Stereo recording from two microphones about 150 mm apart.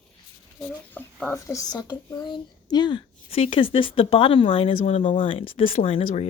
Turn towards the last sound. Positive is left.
turn(degrees=40)  # may be behind; listen again after turning